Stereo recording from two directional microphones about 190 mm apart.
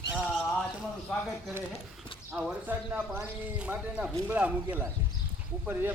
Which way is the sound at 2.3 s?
5° right (ahead or behind).